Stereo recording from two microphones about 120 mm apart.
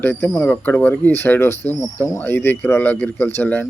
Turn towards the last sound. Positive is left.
turn(degrees=15)  # may be behind; listen again after turning